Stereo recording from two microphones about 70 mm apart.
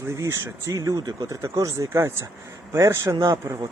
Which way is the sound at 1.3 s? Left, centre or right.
Right.